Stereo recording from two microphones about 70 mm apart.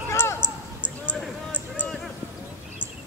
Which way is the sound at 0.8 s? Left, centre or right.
Centre.